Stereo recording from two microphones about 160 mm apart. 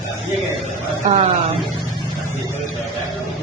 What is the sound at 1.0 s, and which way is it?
Speech, 45° right (ahead or behind).